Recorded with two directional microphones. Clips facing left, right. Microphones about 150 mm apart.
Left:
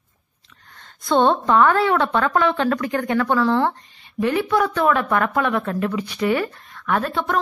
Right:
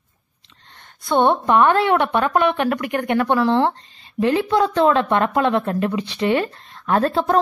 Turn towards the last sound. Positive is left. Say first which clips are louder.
# right 4 dB
turn(degrees=-30)  # may be behind; listen again after turning